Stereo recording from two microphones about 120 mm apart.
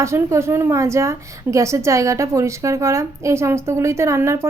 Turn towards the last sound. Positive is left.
turn(degrees=-25)  # may be behind; listen again after turning